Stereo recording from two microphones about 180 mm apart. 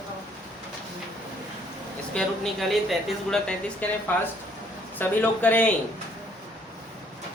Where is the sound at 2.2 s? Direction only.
5° left (ahead or behind).